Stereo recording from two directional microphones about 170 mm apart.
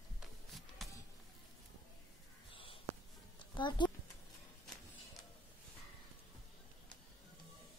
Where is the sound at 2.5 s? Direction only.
30° left (ahead or behind).